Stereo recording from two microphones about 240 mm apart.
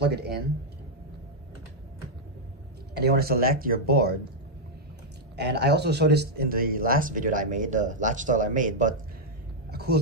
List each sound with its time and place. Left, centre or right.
0.0 s speech: right
2.9 s speech: right
5.3 s speech: right
9.7 s a sound: right